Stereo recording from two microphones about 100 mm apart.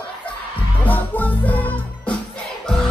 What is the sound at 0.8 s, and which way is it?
Music, 15° left (ahead or behind).